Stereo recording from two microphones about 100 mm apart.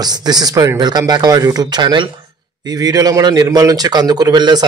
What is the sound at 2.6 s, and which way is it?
A man's voice, 40° right (ahead or behind).